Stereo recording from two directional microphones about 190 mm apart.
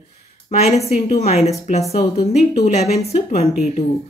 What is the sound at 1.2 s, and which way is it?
Speech, 35° left (ahead or behind).